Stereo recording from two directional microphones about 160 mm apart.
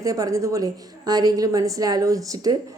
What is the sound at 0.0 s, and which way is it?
A woman's voice, 20° right (ahead or behind).